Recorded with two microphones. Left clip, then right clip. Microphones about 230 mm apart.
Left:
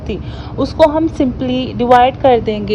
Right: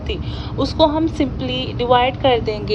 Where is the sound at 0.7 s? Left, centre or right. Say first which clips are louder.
Left 5 dB; centre.